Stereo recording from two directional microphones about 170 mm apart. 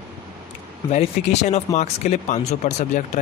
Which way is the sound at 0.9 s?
40° left (ahead or behind).